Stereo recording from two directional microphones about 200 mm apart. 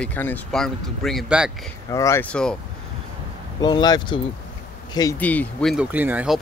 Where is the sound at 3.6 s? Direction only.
20° left (ahead or behind).